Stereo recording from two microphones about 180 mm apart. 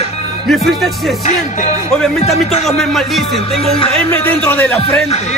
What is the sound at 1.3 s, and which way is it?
Music, 40° left (ahead or behind).